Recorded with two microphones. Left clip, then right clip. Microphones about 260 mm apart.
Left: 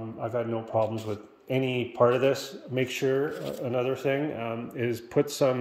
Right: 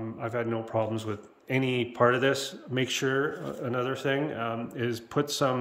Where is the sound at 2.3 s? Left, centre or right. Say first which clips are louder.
Left 1 dB; right.